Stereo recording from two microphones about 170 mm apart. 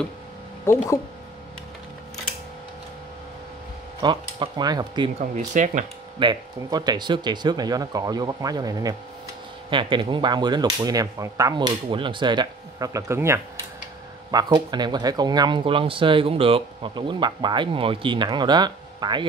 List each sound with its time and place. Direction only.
0.7 s speech: 15° left (ahead or behind)
4.0 s speech: 25° right (ahead or behind)
5.5 s speech: 45° right (ahead or behind)
6.1 s speech: 25° right (ahead or behind)